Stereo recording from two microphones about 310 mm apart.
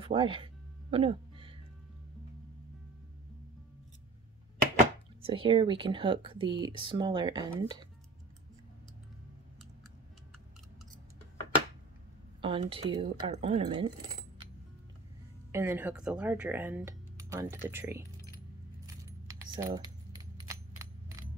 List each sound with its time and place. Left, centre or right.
0.0 s a sound: centre
5.2 s speech: centre
12.4 s speech: centre
15.5 s speech: centre
19.5 s speech: centre
20.3 s a sound: centre